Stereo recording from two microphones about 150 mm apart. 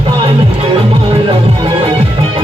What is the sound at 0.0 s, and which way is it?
Music, 35° right (ahead or behind).